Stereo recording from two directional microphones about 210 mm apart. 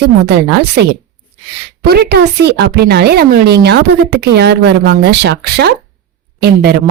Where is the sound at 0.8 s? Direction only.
55° right (ahead or behind).